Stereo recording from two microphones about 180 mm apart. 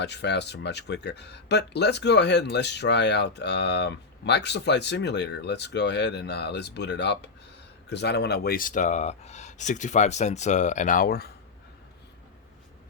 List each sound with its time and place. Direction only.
0.0 s speech: 70° left (ahead or behind)